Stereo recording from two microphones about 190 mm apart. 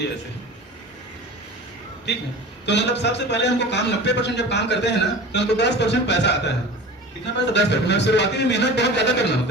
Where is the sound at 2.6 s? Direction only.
65° left (ahead or behind).